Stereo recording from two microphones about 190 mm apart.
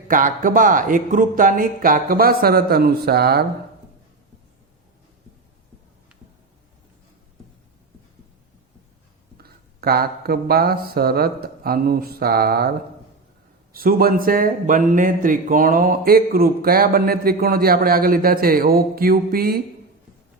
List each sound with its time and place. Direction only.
0.1 s speech: 45° right (ahead or behind)
9.4 s speech: 55° right (ahead or behind)
13.7 s speech: 50° right (ahead or behind)